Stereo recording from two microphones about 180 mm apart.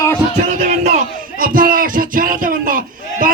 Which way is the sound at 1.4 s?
50° right (ahead or behind).